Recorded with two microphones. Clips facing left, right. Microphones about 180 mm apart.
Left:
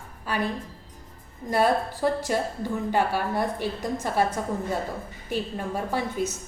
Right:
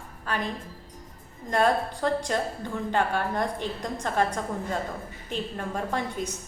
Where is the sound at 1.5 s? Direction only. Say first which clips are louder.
Left 1 dB; 5° left (ahead or behind).